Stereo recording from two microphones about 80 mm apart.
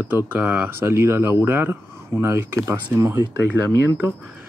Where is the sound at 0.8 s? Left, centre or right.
Right.